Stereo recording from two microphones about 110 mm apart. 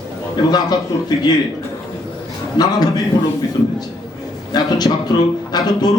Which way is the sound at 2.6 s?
35° left (ahead or behind).